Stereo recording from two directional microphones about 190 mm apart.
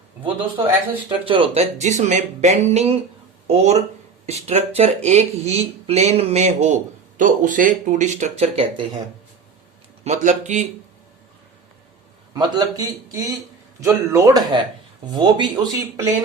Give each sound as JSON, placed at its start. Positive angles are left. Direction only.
{"t": 1.2, "sound": "speech", "side_deg": -25}
{"t": 10.0, "sound": "speech", "side_deg": -40}
{"t": 12.3, "sound": "speech", "side_deg": -20}